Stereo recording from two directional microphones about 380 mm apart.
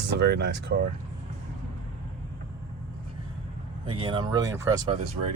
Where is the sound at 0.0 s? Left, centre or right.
Right.